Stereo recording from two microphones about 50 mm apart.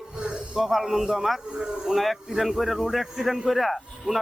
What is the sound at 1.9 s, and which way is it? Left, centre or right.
Speech, centre.